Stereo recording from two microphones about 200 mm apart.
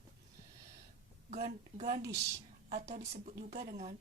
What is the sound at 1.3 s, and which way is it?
A woman's voice, 35° right (ahead or behind).